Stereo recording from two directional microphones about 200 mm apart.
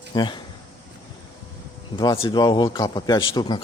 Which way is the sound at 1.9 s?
25° left (ahead or behind).